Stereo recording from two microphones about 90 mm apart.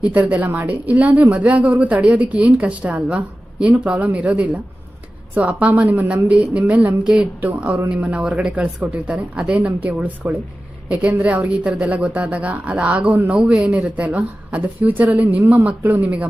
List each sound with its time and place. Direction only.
0.0 s speech: 15° right (ahead or behind)
11.2 s speech: 15° right (ahead or behind)